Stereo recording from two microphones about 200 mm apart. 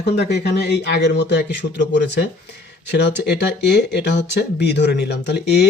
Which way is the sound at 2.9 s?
60° left (ahead or behind).